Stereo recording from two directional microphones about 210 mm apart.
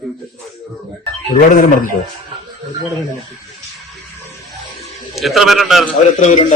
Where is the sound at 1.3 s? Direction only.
40° left (ahead or behind).